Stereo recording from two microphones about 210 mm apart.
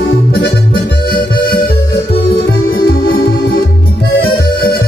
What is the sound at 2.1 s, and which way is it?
Music, 50° left (ahead or behind).